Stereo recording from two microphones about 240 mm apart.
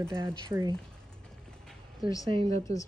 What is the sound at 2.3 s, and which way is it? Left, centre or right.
Speech, right.